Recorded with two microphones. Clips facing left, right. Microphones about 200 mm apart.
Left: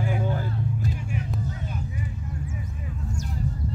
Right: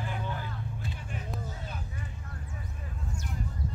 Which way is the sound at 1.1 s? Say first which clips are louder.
Left 7 dB; 10° left (ahead or behind).